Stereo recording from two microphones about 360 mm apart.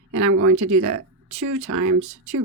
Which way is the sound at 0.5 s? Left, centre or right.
Right.